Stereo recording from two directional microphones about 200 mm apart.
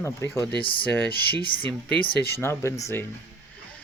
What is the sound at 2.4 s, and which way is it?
Speech, 15° left (ahead or behind).